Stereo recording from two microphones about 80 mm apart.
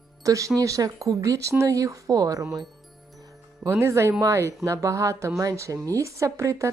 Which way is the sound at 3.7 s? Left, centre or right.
Right.